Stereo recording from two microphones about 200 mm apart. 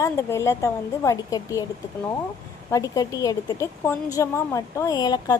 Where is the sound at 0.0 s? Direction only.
15° left (ahead or behind).